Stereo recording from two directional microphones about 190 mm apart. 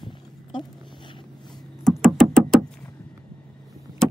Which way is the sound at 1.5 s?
Centre (ahead or behind).